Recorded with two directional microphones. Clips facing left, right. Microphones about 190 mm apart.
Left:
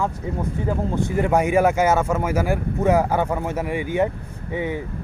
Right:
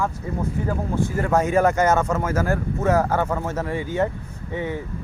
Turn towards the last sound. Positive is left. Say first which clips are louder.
# left 2 dB
turn(degrees=15)  # may be behind; listen again after turning